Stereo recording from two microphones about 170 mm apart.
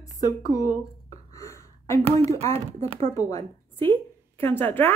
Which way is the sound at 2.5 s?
40° right (ahead or behind).